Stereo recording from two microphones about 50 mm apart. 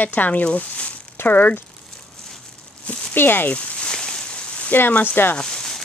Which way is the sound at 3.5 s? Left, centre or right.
Left.